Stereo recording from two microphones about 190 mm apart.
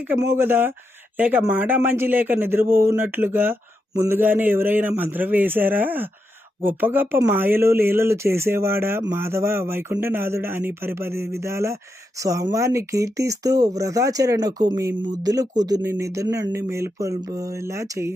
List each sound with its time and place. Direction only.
0.0 s speech: 10° right (ahead or behind)